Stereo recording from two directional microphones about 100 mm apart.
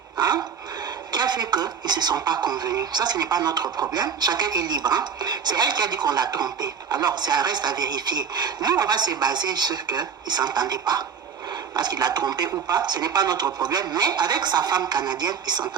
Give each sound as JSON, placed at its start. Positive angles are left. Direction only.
{"t": 0.2, "sound": "gasp", "side_deg": -40}
{"t": 1.1, "sound": "a woman's voice", "side_deg": -45}